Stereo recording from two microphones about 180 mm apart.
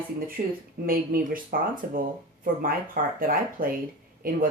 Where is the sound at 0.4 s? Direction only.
50° right (ahead or behind).